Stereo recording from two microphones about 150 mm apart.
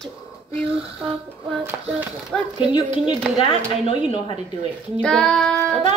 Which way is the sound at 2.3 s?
5° left (ahead or behind).